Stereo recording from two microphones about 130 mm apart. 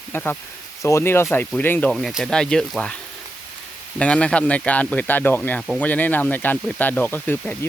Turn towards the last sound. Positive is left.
turn(degrees=15)  # may be behind; listen again after turning